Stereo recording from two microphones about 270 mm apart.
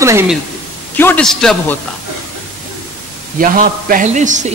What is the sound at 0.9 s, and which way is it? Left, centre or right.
Speech, centre.